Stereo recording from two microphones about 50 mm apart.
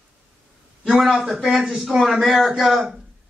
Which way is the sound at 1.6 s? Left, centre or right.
Centre.